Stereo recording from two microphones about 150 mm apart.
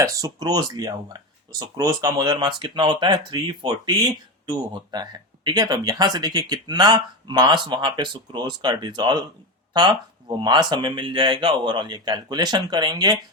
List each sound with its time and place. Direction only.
0.0 s speech: 25° right (ahead or behind)